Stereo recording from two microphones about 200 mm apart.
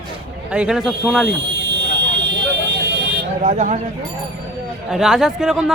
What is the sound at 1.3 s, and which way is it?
Buzzer, 65° right (ahead or behind).